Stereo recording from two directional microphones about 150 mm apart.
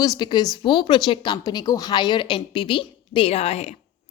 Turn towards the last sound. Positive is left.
turn(degrees=45)  # may be behind; listen again after turning